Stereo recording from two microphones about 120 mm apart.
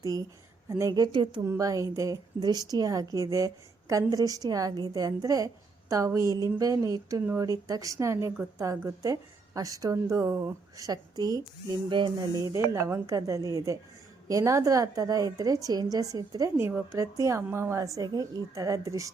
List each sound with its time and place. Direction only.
0.0 s a woman's voice: 30° right (ahead or behind)
1.5 s a woman's voice: 30° right (ahead or behind)
12.3 s a woman's voice: 25° right (ahead or behind)
16.6 s a woman's voice: 20° right (ahead or behind)